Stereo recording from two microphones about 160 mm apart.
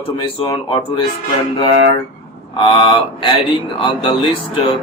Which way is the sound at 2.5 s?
30° left (ahead or behind).